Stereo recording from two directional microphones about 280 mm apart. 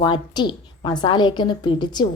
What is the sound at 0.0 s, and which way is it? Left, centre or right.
A woman's voice, centre.